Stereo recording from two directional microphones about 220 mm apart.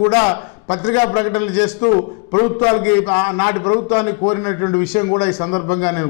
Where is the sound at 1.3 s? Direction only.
10° left (ahead or behind).